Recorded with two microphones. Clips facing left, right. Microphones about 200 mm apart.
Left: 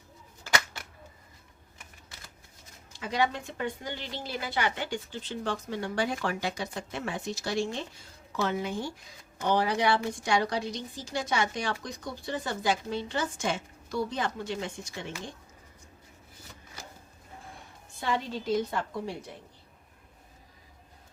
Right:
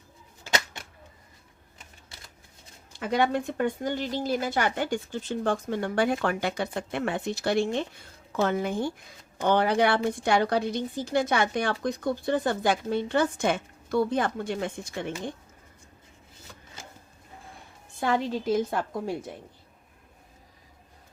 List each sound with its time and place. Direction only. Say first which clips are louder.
0.4 s a sound: right 1 dB; 20° right (ahead or behind)
2.9 s a woman's voice: right 4 dB; 55° right (ahead or behind)
18.0 s a woman's voice: right 5 dB; 50° right (ahead or behind)